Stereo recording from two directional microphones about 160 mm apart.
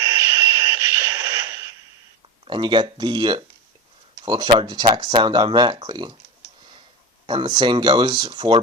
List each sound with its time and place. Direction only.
0.0 s a sound: 20° right (ahead or behind)
2.4 s speech: 30° right (ahead or behind)
7.3 s speech: 30° right (ahead or behind)